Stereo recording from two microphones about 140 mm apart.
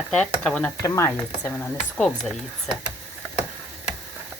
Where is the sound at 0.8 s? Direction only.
20° left (ahead or behind).